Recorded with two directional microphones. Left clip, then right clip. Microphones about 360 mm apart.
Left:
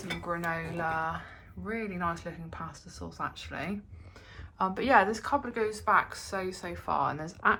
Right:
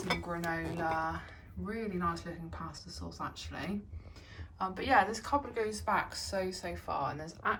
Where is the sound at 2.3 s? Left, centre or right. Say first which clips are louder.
Left 3 dB; left.